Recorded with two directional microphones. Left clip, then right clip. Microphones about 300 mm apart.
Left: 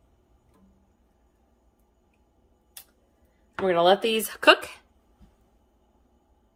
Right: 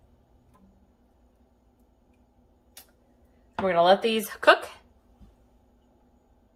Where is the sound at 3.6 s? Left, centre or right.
Left.